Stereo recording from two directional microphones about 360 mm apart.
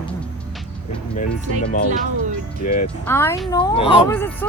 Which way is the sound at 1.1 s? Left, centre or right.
Left.